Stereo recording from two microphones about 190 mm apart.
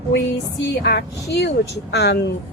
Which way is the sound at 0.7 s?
60° left (ahead or behind).